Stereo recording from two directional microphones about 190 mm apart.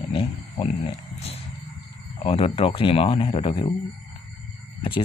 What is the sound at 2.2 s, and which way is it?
Speech, 30° left (ahead or behind).